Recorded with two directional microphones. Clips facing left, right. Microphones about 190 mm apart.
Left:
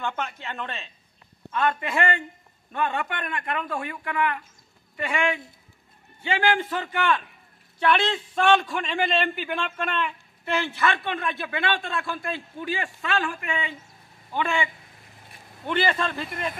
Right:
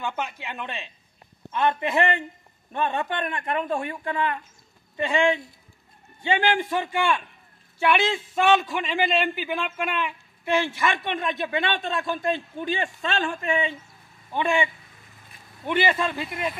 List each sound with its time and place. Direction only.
0.0 s a man's voice: 10° right (ahead or behind)
15.6 s a man's voice: 10° right (ahead or behind)